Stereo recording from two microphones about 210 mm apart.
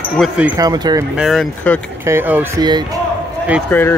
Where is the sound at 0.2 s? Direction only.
Centre (ahead or behind).